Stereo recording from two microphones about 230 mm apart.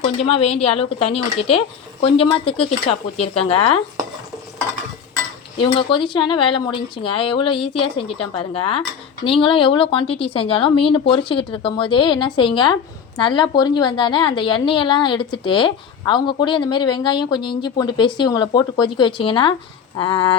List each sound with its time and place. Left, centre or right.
0.0 s a woman's voice: left
5.5 s a woman's voice: left